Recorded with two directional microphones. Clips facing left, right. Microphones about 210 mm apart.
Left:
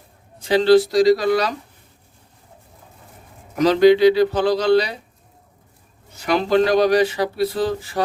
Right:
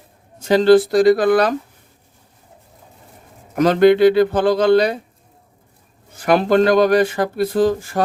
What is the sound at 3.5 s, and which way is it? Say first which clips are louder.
Speech: right 1 dB; 55° right (ahead or behind).